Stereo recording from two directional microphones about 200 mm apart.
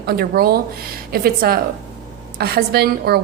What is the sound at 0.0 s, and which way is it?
A woman's voice, 50° right (ahead or behind).